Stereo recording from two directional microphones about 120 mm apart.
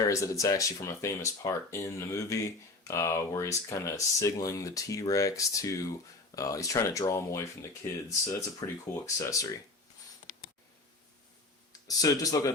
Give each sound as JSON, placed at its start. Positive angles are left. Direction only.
{"t": 0.1, "sound": "speech", "side_deg": 25}
{"t": 11.9, "sound": "speech", "side_deg": 30}